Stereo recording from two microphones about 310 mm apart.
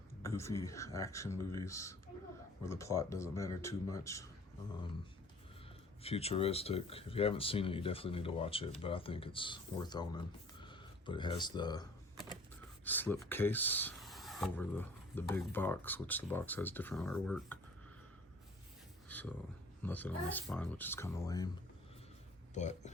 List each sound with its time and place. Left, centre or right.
0.3 s speech: centre
6.0 s speech: centre
19.0 s a sound: centre
19.8 s speech: centre
22.5 s speech: left